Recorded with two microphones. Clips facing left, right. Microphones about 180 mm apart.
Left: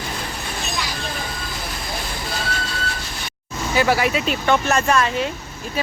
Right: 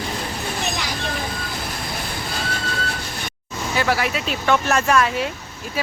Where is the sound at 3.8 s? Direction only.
Centre (ahead or behind).